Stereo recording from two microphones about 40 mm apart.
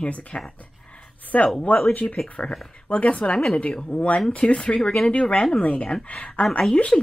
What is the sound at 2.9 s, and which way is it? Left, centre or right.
Speech, left.